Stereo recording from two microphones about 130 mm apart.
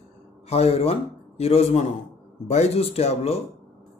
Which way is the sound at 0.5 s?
50° left (ahead or behind).